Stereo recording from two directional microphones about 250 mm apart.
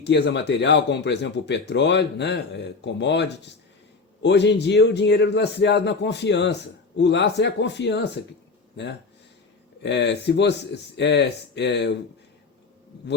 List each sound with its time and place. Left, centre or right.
0.0 s a man's voice: left
9.8 s a man's voice: left